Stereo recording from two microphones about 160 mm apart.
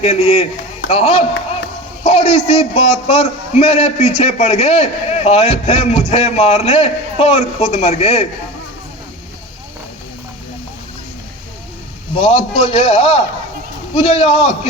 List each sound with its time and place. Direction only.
0.0 s a man's voice: 40° left (ahead or behind)
12.1 s a man's voice: 40° left (ahead or behind)